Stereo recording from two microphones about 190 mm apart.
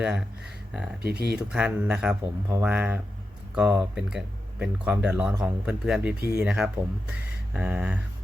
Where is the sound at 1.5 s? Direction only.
5° right (ahead or behind).